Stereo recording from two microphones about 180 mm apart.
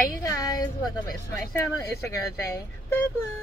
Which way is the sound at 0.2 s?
20° left (ahead or behind).